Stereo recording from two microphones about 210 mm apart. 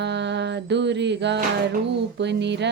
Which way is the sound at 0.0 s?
55° right (ahead or behind).